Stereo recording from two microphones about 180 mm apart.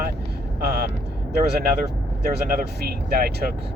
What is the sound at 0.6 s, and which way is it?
Speech, 60° right (ahead or behind).